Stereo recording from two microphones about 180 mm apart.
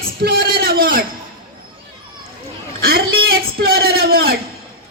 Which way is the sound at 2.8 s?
55° right (ahead or behind).